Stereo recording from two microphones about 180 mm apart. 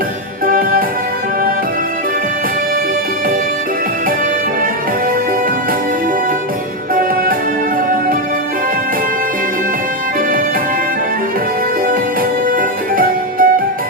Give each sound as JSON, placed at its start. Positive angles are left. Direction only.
{"t": 0.4, "sound": "music", "side_deg": -50}
{"t": 12.5, "sound": "music", "side_deg": -50}